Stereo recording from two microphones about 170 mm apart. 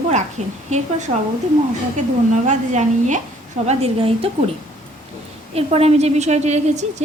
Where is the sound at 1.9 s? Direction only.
45° right (ahead or behind).